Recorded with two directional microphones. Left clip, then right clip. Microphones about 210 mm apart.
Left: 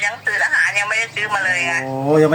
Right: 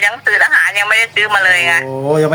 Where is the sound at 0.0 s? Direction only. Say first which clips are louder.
Right 7 dB; 40° right (ahead or behind).